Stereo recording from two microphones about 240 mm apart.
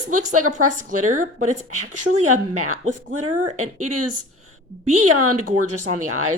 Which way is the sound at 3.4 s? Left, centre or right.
Right.